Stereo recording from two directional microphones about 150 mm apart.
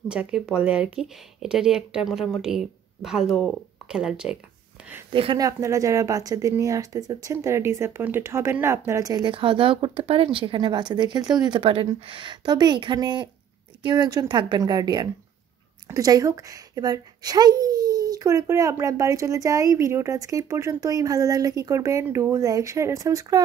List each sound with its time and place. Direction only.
0.1 s speech: 5° right (ahead or behind)
5.1 s speech: 35° right (ahead or behind)
5.4 s a woman's voice: 20° right (ahead or behind)
9.3 s a woman's voice: 35° right (ahead or behind)